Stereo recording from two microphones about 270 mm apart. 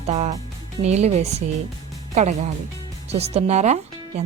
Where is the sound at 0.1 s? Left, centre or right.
Right.